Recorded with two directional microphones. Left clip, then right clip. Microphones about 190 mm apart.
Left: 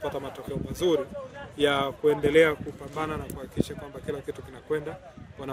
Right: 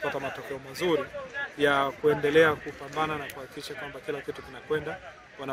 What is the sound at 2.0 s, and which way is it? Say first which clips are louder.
Speech: left 2 dB; 35° left (ahead or behind).